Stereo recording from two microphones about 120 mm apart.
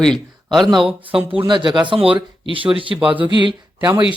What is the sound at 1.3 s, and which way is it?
Speech, 45° right (ahead or behind).